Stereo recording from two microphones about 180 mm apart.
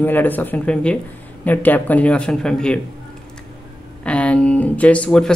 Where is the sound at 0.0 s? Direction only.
10° left (ahead or behind).